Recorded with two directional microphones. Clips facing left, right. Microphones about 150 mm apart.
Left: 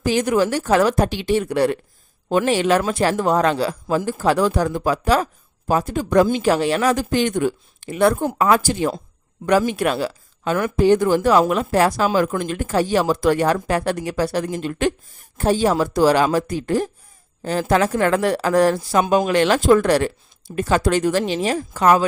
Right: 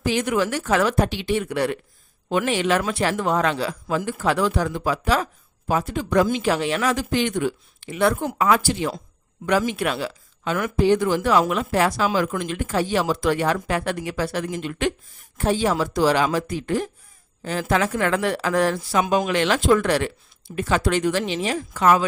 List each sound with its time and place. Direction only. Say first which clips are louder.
0.0 s speech: left 4 dB; 40° left (ahead or behind)